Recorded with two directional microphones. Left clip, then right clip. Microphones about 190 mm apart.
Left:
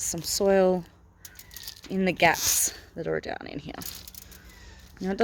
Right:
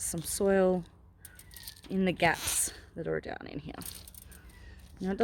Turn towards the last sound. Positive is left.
turn(degrees=-5)  # may be behind; listen again after turning